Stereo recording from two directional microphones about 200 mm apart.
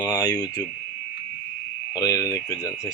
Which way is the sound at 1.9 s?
20° left (ahead or behind).